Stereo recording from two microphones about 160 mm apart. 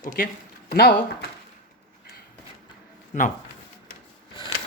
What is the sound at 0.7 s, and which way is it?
Speech, 75° left (ahead or behind).